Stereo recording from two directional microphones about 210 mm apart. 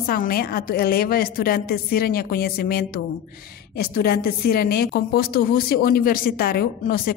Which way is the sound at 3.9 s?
45° left (ahead or behind).